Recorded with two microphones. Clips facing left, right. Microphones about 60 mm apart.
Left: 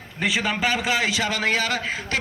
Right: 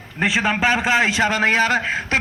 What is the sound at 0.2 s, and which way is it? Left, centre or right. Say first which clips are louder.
A man's voice: right 4 dB; right.